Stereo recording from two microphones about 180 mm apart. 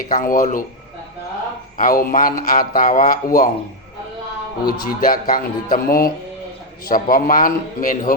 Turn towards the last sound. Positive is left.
turn(degrees=50)  # may be behind; listen again after turning